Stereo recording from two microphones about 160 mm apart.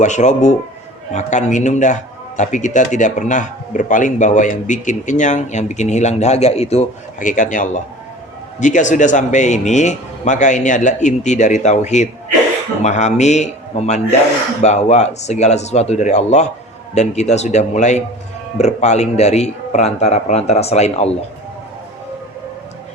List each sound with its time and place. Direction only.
0.0 s a man's voice: 50° left (ahead or behind)